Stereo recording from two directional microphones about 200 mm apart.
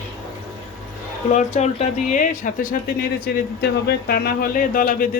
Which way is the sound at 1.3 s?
35° left (ahead or behind).